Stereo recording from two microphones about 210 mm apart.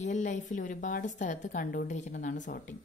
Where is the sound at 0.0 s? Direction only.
35° left (ahead or behind).